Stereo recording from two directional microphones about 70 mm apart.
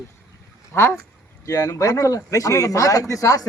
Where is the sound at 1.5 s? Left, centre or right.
Left.